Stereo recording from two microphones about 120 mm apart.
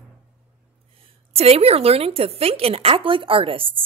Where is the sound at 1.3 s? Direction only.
55° right (ahead or behind).